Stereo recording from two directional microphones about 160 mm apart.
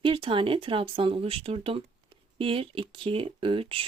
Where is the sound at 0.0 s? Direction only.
30° right (ahead or behind).